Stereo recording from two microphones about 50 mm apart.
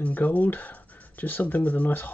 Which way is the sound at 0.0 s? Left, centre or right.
Left.